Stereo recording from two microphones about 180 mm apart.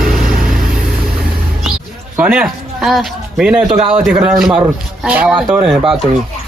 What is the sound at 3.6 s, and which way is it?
Speech, 35° right (ahead or behind).